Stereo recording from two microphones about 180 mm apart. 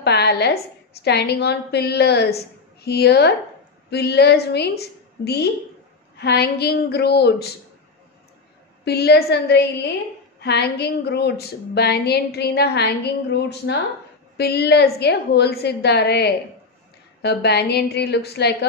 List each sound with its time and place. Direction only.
0.0 s a woman's voice: 65° left (ahead or behind)
8.8 s a woman's voice: 65° left (ahead or behind)